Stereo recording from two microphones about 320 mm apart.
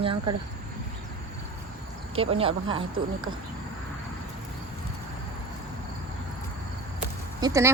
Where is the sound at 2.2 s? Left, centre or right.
Centre.